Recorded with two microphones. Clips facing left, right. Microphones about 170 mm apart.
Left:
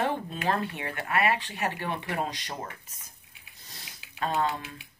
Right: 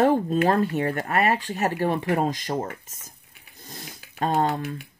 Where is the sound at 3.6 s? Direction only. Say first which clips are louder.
Right 10 dB; 50° right (ahead or behind).